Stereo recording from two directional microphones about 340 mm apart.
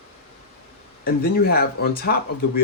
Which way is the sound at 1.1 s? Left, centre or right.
Left.